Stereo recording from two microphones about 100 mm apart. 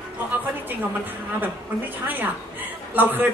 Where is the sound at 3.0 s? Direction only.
20° right (ahead or behind).